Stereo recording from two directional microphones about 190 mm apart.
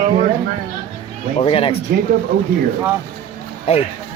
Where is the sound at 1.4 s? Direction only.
30° left (ahead or behind).